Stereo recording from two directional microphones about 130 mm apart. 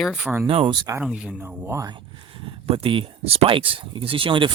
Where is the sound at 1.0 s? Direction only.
5° right (ahead or behind).